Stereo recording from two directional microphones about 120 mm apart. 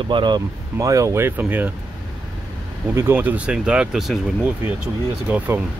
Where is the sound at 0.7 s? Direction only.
25° right (ahead or behind).